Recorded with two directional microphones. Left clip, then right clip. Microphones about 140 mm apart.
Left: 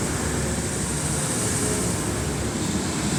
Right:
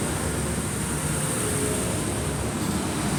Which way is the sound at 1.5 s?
70° left (ahead or behind).